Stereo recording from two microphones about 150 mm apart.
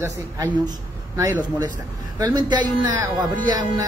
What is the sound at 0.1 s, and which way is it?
Speech, 20° right (ahead or behind).